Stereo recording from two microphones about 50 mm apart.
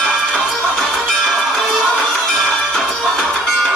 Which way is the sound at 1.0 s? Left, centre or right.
Centre.